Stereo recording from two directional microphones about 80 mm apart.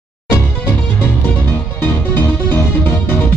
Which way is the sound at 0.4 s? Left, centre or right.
Centre.